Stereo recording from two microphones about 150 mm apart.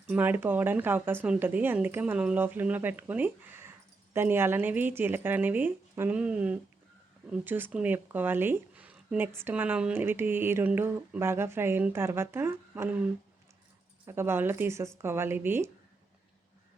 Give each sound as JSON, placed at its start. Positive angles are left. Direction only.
{"t": 0.1, "sound": "speech", "side_deg": -10}
{"t": 14.0, "sound": "speech", "side_deg": -15}